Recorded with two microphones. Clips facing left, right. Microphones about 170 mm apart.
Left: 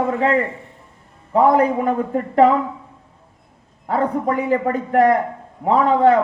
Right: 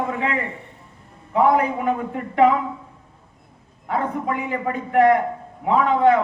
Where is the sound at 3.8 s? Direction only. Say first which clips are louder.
Left 4 dB; 40° left (ahead or behind).